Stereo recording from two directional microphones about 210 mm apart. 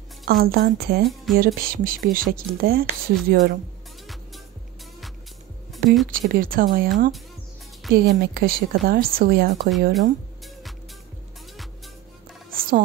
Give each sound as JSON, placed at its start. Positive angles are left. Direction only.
{"t": 0.3, "sound": "speech", "side_deg": -45}
{"t": 1.0, "sound": "speech", "side_deg": 0}
{"t": 1.4, "sound": "speech", "side_deg": -45}
{"t": 5.7, "sound": "music", "side_deg": 0}
{"t": 6.1, "sound": "speech", "side_deg": -40}
{"t": 12.5, "sound": "music", "side_deg": -40}